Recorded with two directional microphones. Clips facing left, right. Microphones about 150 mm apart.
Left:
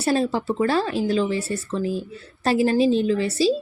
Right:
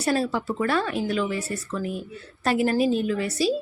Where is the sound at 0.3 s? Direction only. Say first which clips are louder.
Left 3 dB; 30° left (ahead or behind).